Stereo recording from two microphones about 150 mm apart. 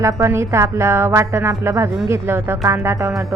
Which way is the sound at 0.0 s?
20° right (ahead or behind).